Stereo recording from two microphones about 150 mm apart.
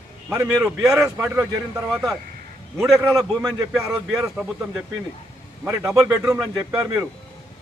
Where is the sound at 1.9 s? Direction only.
Centre (ahead or behind).